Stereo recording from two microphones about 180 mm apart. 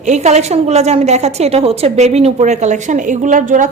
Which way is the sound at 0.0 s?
40° right (ahead or behind).